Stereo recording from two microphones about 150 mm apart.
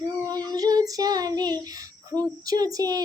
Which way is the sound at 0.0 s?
25° right (ahead or behind).